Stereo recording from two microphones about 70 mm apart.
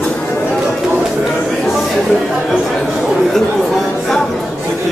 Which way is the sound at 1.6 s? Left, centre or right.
Centre.